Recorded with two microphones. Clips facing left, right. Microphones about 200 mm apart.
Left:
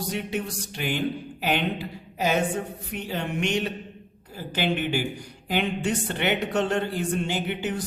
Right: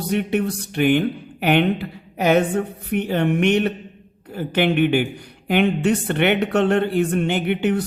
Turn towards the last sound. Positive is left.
turn(degrees=-60)  # may be behind; listen again after turning